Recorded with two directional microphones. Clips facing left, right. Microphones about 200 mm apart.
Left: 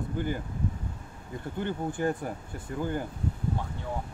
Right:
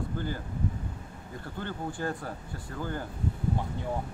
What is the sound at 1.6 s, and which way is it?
Speech, 20° left (ahead or behind).